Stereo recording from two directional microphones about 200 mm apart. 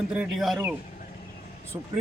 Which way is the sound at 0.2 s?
Centre (ahead or behind).